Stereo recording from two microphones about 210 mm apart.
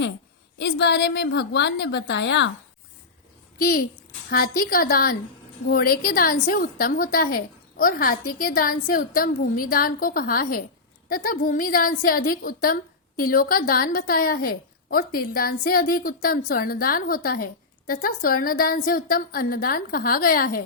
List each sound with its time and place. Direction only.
0.6 s a woman's voice: 55° left (ahead or behind)
3.6 s a woman's voice: 45° left (ahead or behind)